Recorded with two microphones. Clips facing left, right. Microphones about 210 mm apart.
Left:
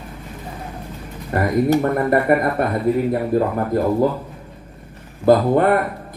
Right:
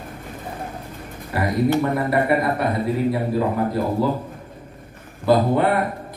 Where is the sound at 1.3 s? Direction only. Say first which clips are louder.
Left 3 dB; 50° left (ahead or behind).